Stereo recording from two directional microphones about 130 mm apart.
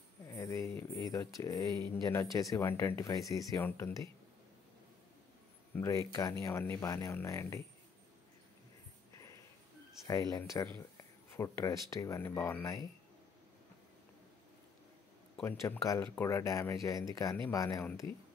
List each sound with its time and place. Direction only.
0.3 s speech: 25° left (ahead or behind)
5.8 s speech: 25° left (ahead or behind)
10.0 s speech: 30° left (ahead or behind)
15.4 s speech: 20° left (ahead or behind)